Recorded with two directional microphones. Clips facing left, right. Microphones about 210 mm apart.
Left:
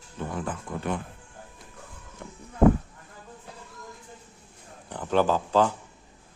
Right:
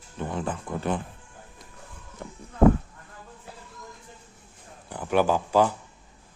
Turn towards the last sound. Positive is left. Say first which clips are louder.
# right 1 dB
turn(degrees=-10)  # may be behind; listen again after turning